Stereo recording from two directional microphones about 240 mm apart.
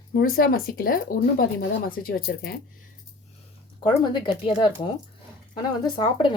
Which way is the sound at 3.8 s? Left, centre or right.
Centre.